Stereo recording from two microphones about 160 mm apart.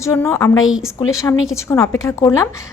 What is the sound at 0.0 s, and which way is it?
A woman's voice, 20° left (ahead or behind).